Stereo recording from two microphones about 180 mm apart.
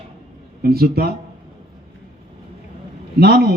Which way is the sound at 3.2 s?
60° right (ahead or behind).